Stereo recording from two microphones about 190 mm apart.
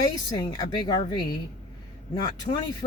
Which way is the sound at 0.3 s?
20° left (ahead or behind).